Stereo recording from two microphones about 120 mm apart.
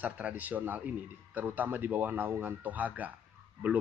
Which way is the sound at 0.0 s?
15° right (ahead or behind).